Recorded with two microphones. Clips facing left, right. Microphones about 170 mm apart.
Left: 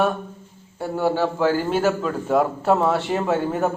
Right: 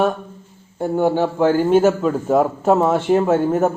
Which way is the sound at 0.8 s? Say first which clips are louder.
Right 4 dB; 20° right (ahead or behind).